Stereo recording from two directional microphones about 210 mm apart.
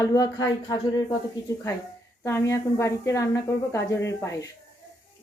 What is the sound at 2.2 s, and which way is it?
A woman's voice, 15° left (ahead or behind).